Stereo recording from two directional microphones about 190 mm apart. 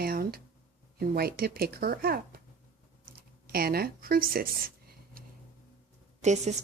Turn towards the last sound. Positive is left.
turn(degrees=-35)  # may be behind; listen again after turning